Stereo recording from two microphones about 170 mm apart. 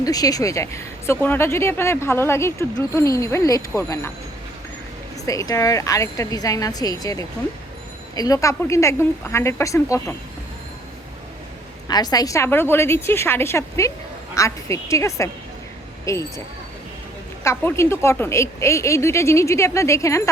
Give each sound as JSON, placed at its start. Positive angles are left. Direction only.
{"t": 0.0, "sound": "speech", "side_deg": 20}
{"t": 5.2, "sound": "a woman's voice", "side_deg": 20}
{"t": 11.9, "sound": "speech", "side_deg": 25}
{"t": 17.4, "sound": "speech", "side_deg": 15}